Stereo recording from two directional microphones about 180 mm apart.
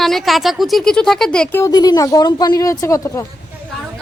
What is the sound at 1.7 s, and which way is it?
Speech, 20° left (ahead or behind).